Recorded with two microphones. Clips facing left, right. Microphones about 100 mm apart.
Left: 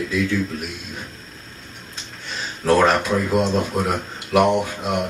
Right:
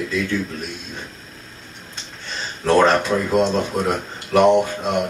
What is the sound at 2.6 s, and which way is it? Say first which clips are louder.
Speech: right 1 dB; centre (ahead or behind).